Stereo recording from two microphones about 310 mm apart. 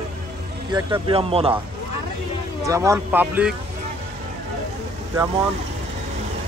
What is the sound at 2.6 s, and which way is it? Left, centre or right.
Speech, centre.